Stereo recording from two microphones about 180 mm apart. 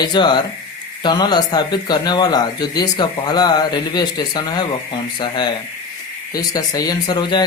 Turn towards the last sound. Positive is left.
turn(degrees=20)  # may be behind; listen again after turning